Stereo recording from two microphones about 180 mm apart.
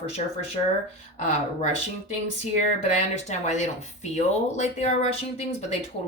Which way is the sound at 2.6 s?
40° left (ahead or behind).